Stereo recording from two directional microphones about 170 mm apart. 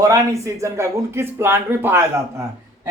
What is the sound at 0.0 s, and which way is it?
Speech, 20° right (ahead or behind).